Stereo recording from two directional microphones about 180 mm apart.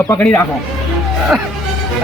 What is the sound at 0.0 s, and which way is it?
Speech, 15° left (ahead or behind).